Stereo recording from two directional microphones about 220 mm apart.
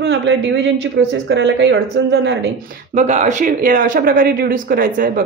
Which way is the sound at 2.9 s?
30° right (ahead or behind).